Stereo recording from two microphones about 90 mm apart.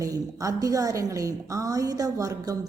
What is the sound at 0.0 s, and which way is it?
Speech, 40° right (ahead or behind).